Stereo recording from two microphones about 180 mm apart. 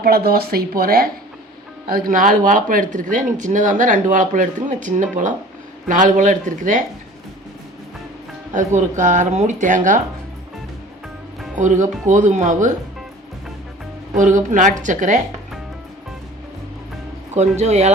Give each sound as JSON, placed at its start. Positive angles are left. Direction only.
{"t": 0.0, "sound": "speech", "side_deg": -60}
{"t": 8.5, "sound": "speech", "side_deg": -45}
{"t": 11.5, "sound": "speech", "side_deg": -45}
{"t": 14.2, "sound": "speech", "side_deg": -45}
{"t": 17.3, "sound": "speech", "side_deg": -35}